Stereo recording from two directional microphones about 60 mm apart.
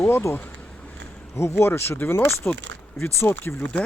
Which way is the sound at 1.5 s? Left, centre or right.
Left.